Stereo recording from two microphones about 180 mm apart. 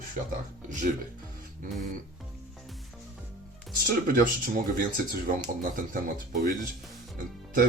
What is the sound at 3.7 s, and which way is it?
Speech, 55° right (ahead or behind).